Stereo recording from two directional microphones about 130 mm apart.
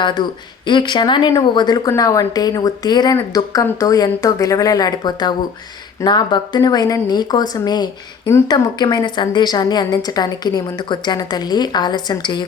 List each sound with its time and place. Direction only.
0.2 s a woman's voice: 35° left (ahead or behind)